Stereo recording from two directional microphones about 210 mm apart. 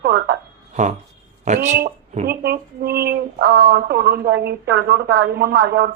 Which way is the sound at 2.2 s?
50° right (ahead or behind).